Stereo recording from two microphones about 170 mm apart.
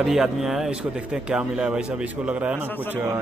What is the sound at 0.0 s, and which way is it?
A man's voice, 5° right (ahead or behind).